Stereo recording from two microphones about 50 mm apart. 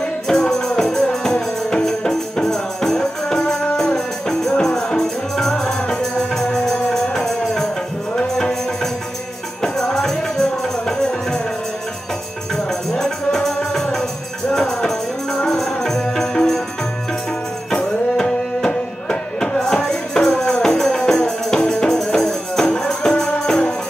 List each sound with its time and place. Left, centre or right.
0.3 s music: centre
9.6 s music: centre
12.5 s music: centre
14.5 s music: centre
17.6 s music: centre